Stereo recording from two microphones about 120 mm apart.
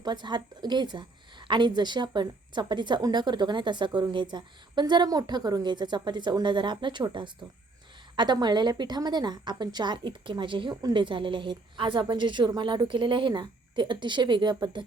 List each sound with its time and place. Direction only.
0.0 s a woman's voice: 40° right (ahead or behind)